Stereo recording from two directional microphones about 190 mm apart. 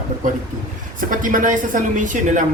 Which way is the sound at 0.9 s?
45° right (ahead or behind).